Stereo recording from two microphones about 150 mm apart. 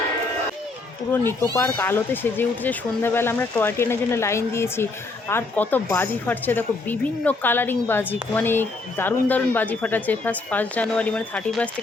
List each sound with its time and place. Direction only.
1.1 s speech: 15° left (ahead or behind)